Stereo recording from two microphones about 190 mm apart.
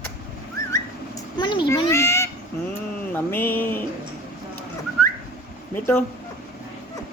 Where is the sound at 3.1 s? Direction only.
10° left (ahead or behind).